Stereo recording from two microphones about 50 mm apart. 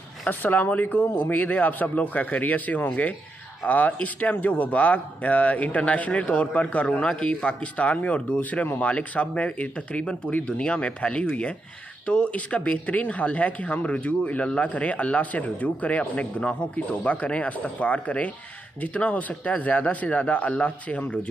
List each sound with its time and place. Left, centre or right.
0.3 s speech: left